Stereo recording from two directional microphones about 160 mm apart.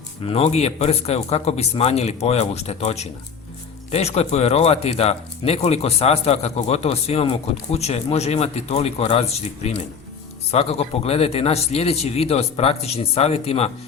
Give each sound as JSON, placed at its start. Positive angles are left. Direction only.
{"t": 0.3, "sound": "speech", "side_deg": 40}